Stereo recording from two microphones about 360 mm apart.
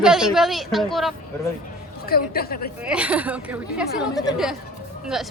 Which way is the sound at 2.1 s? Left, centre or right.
Left.